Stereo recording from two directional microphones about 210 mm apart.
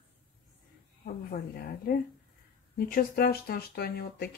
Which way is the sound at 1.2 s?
45° left (ahead or behind).